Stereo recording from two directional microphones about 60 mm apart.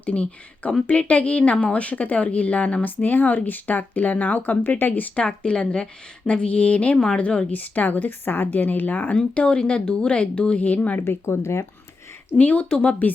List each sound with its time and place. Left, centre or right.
0.0 s speech: left
9.1 s speech: centre
11.0 s speech: left
12.4 s speech: left